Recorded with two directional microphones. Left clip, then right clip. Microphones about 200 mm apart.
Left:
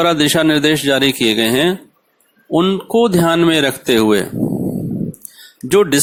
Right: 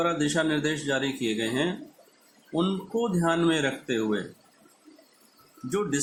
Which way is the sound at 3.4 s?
50° left (ahead or behind).